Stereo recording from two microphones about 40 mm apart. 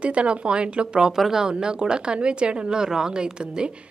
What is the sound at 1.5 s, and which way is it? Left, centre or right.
Speech, right.